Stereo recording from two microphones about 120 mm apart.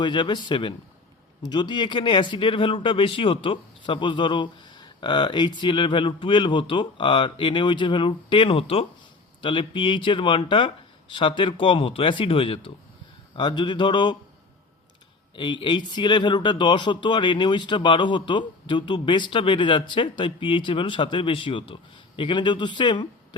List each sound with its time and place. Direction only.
0.0 s speech: 40° left (ahead or behind)
15.4 s speech: 40° left (ahead or behind)